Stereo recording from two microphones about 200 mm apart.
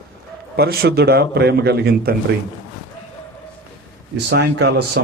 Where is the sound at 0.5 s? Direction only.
50° right (ahead or behind).